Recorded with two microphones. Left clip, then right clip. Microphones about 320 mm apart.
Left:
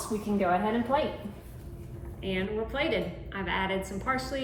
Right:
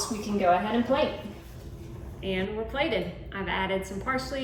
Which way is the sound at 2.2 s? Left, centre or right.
Centre.